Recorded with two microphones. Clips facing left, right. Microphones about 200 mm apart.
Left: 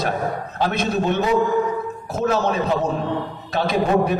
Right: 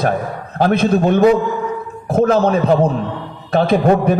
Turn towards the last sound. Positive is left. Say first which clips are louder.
# right 7 dB
turn(degrees=-55)  # may be behind; listen again after turning